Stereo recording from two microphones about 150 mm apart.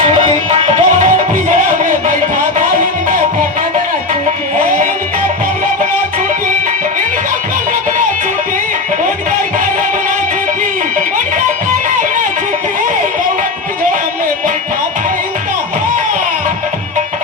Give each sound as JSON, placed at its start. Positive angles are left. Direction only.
{"t": 0.5, "sound": "music", "side_deg": -55}